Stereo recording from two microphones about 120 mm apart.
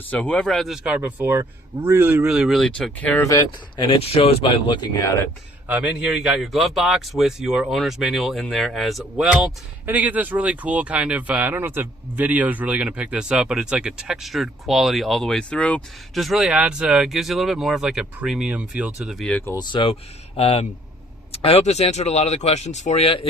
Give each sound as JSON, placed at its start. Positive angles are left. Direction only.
{"t": 0.1, "sound": "a man's voice", "side_deg": 10}
{"t": 2.2, "sound": "a man's voice", "side_deg": -5}
{"t": 3.8, "sound": "speech", "side_deg": 50}
{"t": 5.0, "sound": "speech", "side_deg": 25}
{"t": 5.6, "sound": "a man's voice", "side_deg": -10}
{"t": 19.1, "sound": "speech", "side_deg": 5}
{"t": 19.5, "sound": "speech", "side_deg": 45}
{"t": 23.0, "sound": "speech", "side_deg": 50}